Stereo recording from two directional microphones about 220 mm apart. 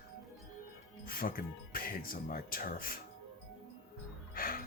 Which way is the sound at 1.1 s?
40° left (ahead or behind).